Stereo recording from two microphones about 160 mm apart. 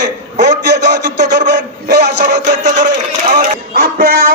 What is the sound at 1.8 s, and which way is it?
Speech, 65° right (ahead or behind).